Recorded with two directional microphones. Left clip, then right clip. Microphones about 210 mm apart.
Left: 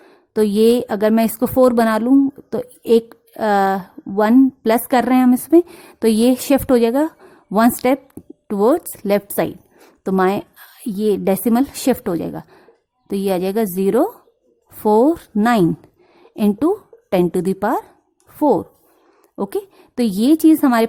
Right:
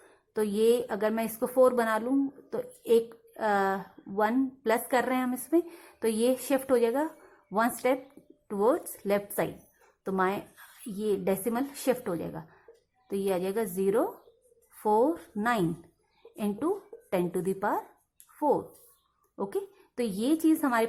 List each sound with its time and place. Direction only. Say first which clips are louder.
0.0 s a woman's voice: left 13 dB; 45° left (ahead or behind)